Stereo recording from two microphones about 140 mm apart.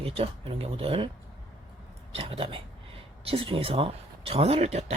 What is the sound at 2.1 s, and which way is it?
Speech, 45° right (ahead or behind).